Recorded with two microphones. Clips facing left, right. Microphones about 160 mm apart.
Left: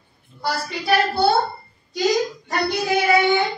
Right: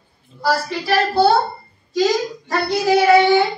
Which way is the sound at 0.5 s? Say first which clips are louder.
Right 3 dB; 90° right.